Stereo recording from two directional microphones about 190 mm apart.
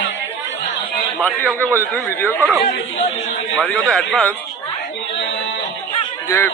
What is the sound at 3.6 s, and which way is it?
Speech, 5° left (ahead or behind).